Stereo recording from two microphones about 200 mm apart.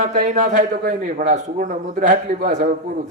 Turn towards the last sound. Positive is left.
turn(degrees=-45)  # may be behind; listen again after turning